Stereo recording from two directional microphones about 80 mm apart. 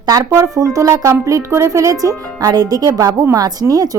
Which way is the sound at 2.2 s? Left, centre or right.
Right.